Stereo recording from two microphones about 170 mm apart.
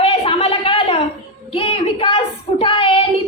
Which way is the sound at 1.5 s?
35° left (ahead or behind).